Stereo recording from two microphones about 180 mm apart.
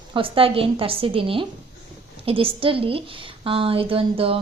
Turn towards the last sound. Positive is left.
turn(degrees=-30)  # may be behind; listen again after turning